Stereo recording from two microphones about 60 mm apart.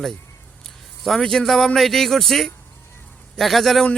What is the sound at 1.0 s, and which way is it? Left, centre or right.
Speech, centre.